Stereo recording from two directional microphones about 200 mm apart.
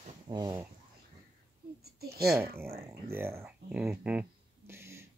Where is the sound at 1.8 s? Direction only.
50° right (ahead or behind).